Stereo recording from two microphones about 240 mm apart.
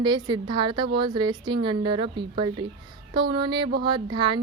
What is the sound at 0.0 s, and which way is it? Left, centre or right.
Speech, centre.